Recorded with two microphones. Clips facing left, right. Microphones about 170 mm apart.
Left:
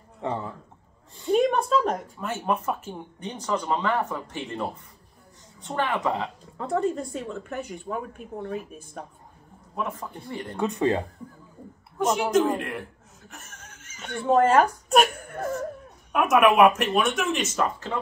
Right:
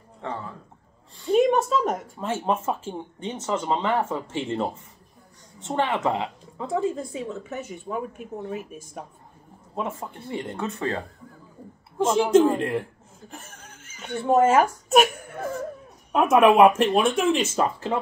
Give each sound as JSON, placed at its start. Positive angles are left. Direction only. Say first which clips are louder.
{"t": 0.2, "sound": "a sound", "louder": "left 3 dB", "side_deg": 20}
{"t": 1.2, "sound": "a sound", "louder": "right 2 dB", "side_deg": 0}
{"t": 1.6, "sound": "a woman's voice", "louder": "even", "side_deg": -5}
{"t": 2.1, "sound": "speech", "louder": "right 2 dB", "side_deg": -30}
{"t": 6.6, "sound": "a woman's voice", "louder": "even", "side_deg": -5}
{"t": 9.8, "sound": "speech", "louder": "right 1 dB", "side_deg": -25}
{"t": 10.6, "sound": "speech", "louder": "left 7 dB", "side_deg": 15}
{"t": 12.3, "sound": "speech", "louder": "right 4 dB", "side_deg": -30}
{"t": 13.3, "sound": "chuckle", "louder": "right 3 dB", "side_deg": -30}
{"t": 14.0, "sound": "a woman's voice", "louder": "right 1 dB", "side_deg": -5}
{"t": 16.1, "sound": "speech", "louder": "right 2 dB", "side_deg": -30}